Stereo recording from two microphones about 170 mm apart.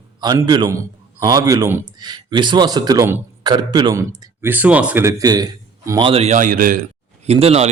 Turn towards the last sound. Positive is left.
turn(degrees=-35)  # may be behind; listen again after turning